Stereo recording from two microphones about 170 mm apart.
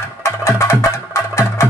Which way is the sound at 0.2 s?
15° left (ahead or behind).